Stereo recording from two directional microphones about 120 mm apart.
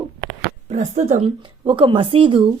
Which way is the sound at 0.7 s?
75° right (ahead or behind).